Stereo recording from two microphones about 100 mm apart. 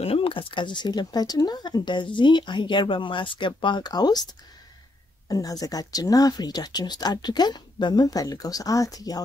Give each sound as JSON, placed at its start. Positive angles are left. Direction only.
{"t": 0.0, "sound": "speech", "side_deg": 70}
{"t": 5.3, "sound": "speech", "side_deg": 35}